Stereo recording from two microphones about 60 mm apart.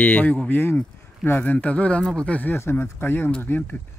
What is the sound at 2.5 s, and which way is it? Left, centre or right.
Speech, left.